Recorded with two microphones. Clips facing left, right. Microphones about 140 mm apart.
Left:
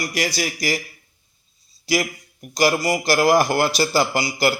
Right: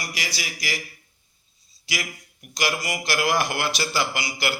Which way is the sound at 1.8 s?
40° left (ahead or behind).